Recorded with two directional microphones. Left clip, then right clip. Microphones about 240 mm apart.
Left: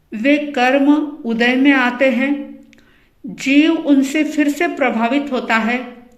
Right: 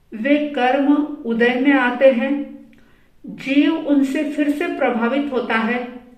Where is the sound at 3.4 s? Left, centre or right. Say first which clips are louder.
Left 4 dB; left.